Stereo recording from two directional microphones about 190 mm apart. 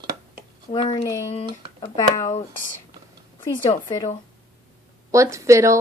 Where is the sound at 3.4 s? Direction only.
25° left (ahead or behind).